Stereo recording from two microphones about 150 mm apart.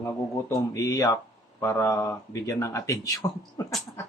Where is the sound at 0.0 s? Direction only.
20° left (ahead or behind).